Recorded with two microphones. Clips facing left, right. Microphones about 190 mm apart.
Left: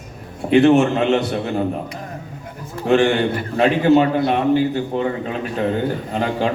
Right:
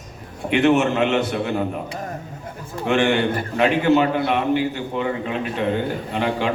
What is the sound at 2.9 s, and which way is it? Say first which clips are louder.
A man's voice: left 3 dB; 35° left (ahead or behind).